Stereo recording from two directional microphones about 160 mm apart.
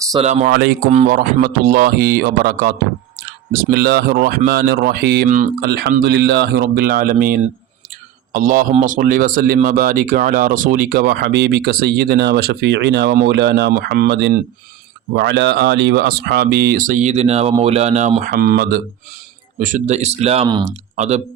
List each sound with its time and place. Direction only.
0.2 s speech: 40° right (ahead or behind)
0.4 s speech: 75° right (ahead or behind)
5.3 s speech: 55° right (ahead or behind)
5.6 s a man's voice: 70° right (ahead or behind); by 18.3 s 45° right (ahead or behind)
18.3 s speech: 65° right (ahead or behind)
19.5 s speech: 55° right (ahead or behind)